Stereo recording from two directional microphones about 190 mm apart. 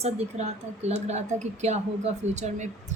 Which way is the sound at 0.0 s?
35° right (ahead or behind).